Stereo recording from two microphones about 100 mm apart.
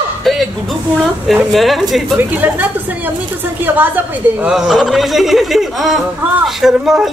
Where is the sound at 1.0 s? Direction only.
Centre (ahead or behind).